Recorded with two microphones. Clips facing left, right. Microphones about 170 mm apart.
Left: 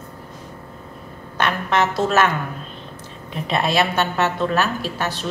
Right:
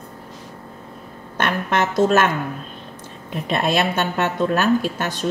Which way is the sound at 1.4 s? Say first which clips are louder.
Left 1 dB; 50° right (ahead or behind).